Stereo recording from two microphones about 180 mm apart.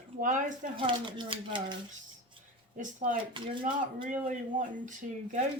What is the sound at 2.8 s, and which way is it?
Speech, 45° right (ahead or behind).